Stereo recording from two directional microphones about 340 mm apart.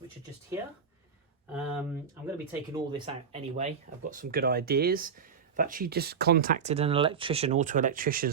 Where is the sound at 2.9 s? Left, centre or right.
Centre.